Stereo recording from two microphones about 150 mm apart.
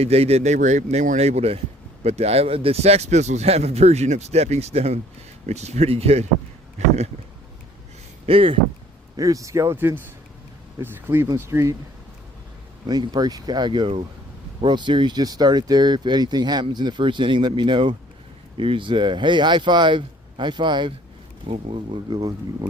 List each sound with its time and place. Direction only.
0.0 s speech: 45° right (ahead or behind)
8.3 s speech: 40° right (ahead or behind)
9.1 s speech: 20° right (ahead or behind)
12.9 s speech: 25° right (ahead or behind)